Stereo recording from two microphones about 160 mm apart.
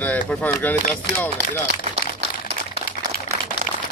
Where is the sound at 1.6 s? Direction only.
90° right.